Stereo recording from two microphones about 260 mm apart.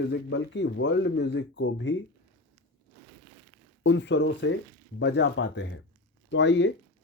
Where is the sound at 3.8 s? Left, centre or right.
Left.